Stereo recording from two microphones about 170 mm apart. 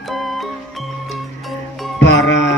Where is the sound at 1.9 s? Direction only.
90° left.